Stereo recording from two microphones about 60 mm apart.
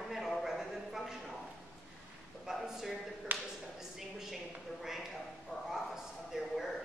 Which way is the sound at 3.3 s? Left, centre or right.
Right.